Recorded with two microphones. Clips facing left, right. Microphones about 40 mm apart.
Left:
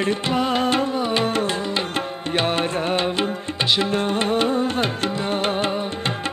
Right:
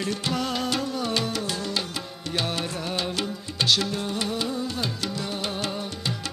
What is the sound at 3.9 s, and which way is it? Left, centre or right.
Music, left.